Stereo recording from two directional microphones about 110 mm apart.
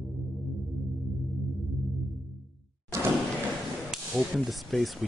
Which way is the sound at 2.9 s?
25° right (ahead or behind).